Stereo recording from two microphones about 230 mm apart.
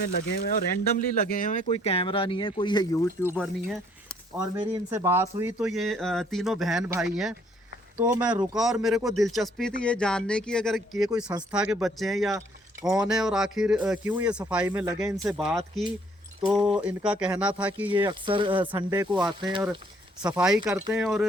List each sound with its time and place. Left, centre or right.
0.0 s speech: left; by 2.8 s centre
3.2 s speech: centre
15.2 s speech: centre
16.6 s speech: centre
17.8 s speech: centre
20.4 s speech: centre